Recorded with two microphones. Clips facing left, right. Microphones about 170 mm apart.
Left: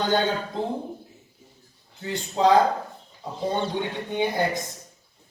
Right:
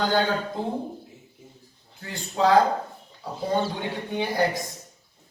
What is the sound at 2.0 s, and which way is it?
Speech, 20° left (ahead or behind).